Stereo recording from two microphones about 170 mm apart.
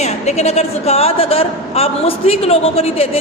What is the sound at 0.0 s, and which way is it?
A man's voice, 40° left (ahead or behind).